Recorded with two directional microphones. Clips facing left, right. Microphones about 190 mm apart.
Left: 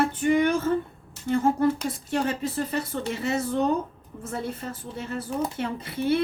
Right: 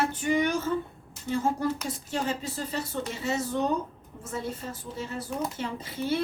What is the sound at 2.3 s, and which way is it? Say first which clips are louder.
A woman's voice: left 5 dB; 60° left (ahead or behind).